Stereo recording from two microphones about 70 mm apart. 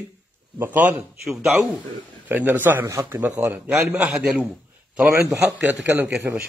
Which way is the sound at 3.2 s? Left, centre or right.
Right.